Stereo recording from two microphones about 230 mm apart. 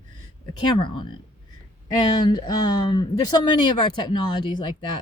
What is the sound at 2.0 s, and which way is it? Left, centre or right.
A woman's voice, centre.